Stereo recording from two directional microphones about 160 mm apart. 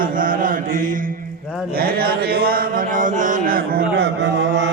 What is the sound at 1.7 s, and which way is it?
Chant, 70° right (ahead or behind).